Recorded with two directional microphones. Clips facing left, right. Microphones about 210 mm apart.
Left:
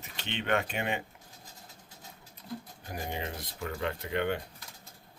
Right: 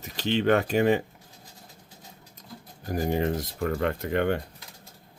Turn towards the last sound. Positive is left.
turn(degrees=-50)  # may be behind; listen again after turning